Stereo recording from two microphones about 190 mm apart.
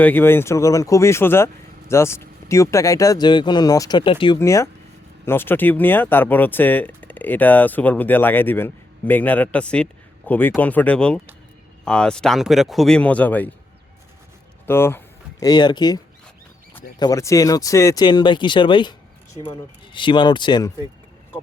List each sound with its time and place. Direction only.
0.0 s speech: 10° left (ahead or behind); by 4.4 s 25° left (ahead or behind)
4.4 s speech: 15° left (ahead or behind)
14.7 s speech: 10° left (ahead or behind)
17.0 s speech: 15° left (ahead or behind)